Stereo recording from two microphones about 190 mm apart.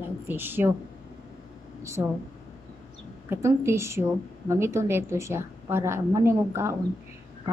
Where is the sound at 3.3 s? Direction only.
15° right (ahead or behind).